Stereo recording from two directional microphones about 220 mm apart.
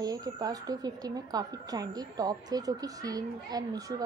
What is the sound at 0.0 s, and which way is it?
A woman's voice, 15° right (ahead or behind).